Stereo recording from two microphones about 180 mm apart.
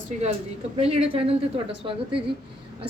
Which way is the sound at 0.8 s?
35° right (ahead or behind).